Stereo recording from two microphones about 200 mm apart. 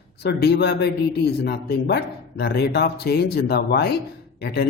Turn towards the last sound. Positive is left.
turn(degrees=50)  # may be behind; listen again after turning